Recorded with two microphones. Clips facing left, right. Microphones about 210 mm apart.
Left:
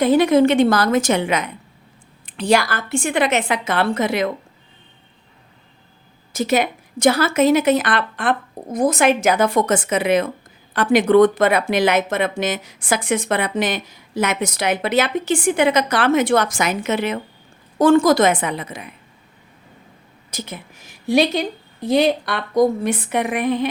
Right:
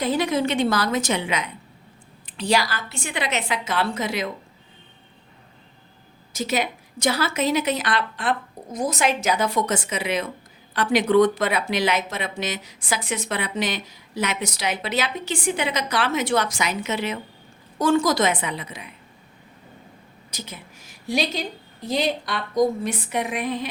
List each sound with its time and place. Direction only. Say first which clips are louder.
0.0 s speech: left 9 dB; 55° left (ahead or behind)
6.3 s speech: left 6 dB; 55° left (ahead or behind)
20.3 s a woman's voice: left 6 dB; 55° left (ahead or behind)